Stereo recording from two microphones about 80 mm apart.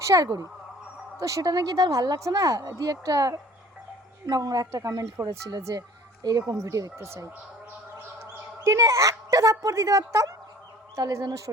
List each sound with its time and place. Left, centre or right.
0.0 s a woman's voice: right
6.5 s a woman's voice: right